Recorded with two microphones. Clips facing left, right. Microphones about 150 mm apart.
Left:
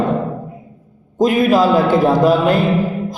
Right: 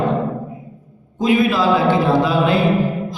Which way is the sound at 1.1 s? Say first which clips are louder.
Left 3 dB; 45° left (ahead or behind).